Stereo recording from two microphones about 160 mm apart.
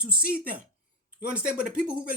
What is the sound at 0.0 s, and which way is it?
Speech, 5° right (ahead or behind).